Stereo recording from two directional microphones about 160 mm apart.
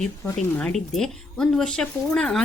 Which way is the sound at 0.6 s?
5° left (ahead or behind).